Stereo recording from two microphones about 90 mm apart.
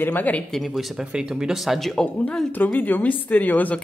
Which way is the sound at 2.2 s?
20° left (ahead or behind).